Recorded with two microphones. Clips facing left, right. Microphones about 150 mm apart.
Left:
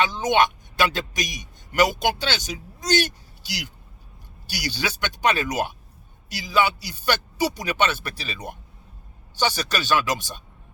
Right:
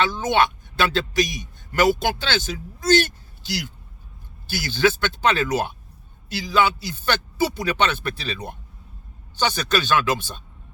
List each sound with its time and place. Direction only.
0.0 s a man's voice: 15° left (ahead or behind)